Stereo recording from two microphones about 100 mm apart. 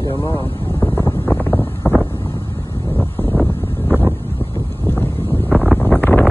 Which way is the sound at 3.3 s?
Centre (ahead or behind).